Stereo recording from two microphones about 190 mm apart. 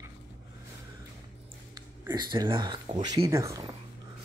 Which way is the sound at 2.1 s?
20° right (ahead or behind).